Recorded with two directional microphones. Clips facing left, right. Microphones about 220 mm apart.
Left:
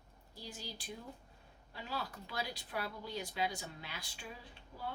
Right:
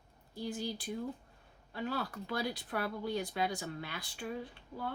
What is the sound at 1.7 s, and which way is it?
Speech, 55° right (ahead or behind).